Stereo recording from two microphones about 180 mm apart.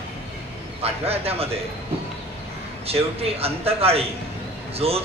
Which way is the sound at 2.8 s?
35° right (ahead or behind).